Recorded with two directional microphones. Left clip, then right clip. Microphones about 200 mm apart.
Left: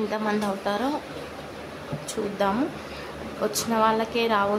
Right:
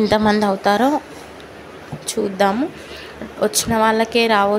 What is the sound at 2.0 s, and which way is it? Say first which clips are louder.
A woman's voice: right 8 dB; 25° right (ahead or behind).